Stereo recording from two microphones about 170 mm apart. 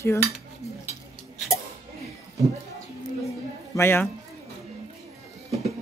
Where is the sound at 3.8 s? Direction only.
15° left (ahead or behind).